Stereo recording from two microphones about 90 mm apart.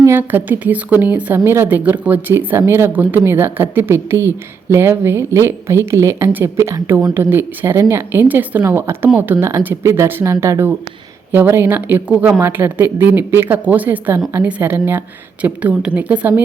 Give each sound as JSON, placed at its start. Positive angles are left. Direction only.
{"t": 0.0, "sound": "a woman's voice", "side_deg": -25}